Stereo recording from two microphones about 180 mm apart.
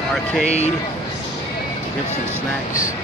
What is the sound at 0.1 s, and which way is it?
Speech, 5° left (ahead or behind).